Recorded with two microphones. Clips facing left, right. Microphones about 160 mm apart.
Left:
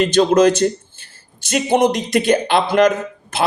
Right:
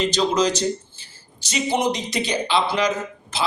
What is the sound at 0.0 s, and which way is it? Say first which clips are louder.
Speech: left 7 dB; 55° left (ahead or behind).